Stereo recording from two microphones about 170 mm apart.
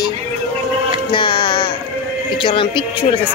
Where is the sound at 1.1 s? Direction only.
30° left (ahead or behind).